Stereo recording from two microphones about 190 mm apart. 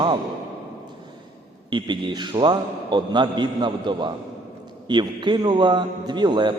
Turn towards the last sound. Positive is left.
turn(degrees=-25)  # may be behind; listen again after turning